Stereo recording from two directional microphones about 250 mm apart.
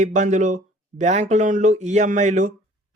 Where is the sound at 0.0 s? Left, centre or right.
Right.